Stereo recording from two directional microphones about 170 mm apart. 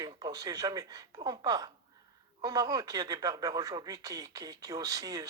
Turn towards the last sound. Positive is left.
turn(degrees=-20)  # may be behind; listen again after turning